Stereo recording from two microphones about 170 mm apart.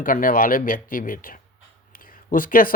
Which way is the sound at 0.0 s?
55° left (ahead or behind).